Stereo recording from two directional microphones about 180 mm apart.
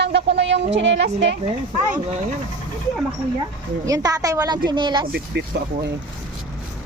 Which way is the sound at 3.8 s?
20° right (ahead or behind).